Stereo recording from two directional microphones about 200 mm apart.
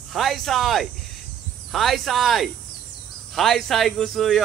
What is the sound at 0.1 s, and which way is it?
Speech, centre (ahead or behind).